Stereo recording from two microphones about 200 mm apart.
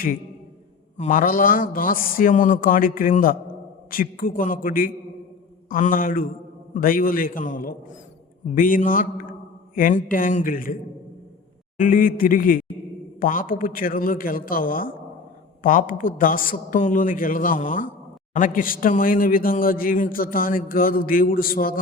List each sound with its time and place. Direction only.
0.9 s a man's voice: 40° left (ahead or behind)
11.8 s a man's voice: 45° left (ahead or behind)